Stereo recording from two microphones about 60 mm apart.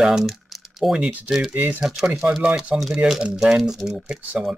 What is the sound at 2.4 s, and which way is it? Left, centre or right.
Speech, centre.